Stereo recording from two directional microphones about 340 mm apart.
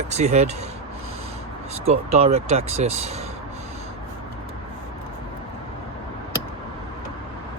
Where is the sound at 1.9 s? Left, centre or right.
Centre.